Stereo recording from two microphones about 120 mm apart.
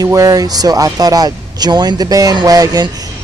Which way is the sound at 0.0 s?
30° right (ahead or behind).